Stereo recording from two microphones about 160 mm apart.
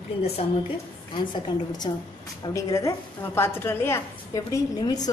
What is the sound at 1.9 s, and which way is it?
A woman's voice, 30° left (ahead or behind).